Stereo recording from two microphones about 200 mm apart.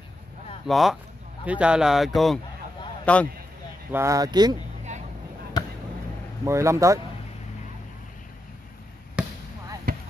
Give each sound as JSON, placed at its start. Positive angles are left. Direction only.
{"t": 0.7, "sound": "speech", "side_deg": 0}
{"t": 3.9, "sound": "speech", "side_deg": -15}
{"t": 6.4, "sound": "speech", "side_deg": -15}
{"t": 9.2, "sound": "basketball bounce", "side_deg": -5}
{"t": 9.9, "sound": "basketball bounce", "side_deg": -45}